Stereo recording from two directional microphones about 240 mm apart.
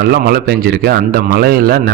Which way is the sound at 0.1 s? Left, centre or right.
Right.